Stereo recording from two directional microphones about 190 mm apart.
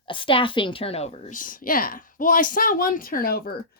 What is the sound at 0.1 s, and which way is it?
A woman's voice, 25° left (ahead or behind).